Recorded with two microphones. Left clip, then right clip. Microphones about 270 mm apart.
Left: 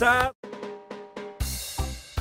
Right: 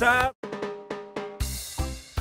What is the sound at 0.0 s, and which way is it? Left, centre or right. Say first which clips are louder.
Speech: even; centre.